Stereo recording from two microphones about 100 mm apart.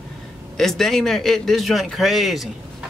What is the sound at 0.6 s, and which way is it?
A man's voice, 5° left (ahead or behind).